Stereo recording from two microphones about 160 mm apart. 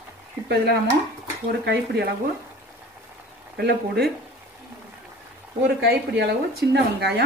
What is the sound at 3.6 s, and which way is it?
Speech, 90° right.